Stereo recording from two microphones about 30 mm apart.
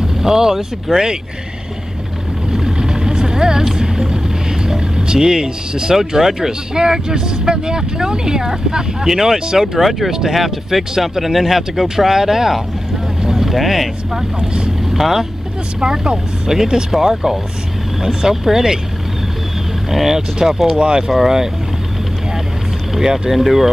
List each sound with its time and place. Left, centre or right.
0.0 s speech: centre
2.6 s vehicle: right
4.9 s speech: right
6.7 s speech: right
13.2 s vehicle: centre
13.5 s speech: centre
19.9 s speech: centre
23.3 s speech: centre